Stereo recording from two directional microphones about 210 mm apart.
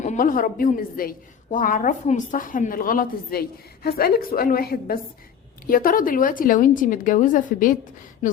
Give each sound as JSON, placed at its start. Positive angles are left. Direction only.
{"t": 0.0, "sound": "a woman's voice", "side_deg": 40}